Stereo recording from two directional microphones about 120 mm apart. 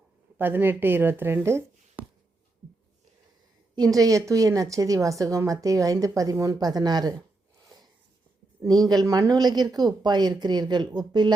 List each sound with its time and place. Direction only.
0.3 s speech: 15° right (ahead or behind)
3.8 s a woman's voice: 30° right (ahead or behind)
8.6 s speech: 35° right (ahead or behind)